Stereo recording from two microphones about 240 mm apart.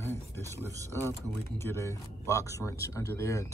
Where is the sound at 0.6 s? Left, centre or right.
Centre.